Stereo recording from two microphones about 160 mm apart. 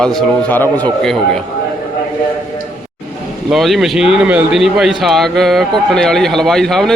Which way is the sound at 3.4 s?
Centre (ahead or behind).